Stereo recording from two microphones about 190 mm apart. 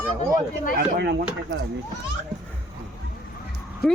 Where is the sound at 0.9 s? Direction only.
60° right (ahead or behind).